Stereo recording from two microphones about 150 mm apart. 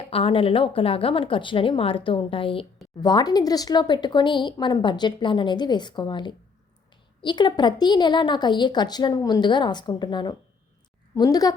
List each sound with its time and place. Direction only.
0.1 s a woman's voice: 35° left (ahead or behind)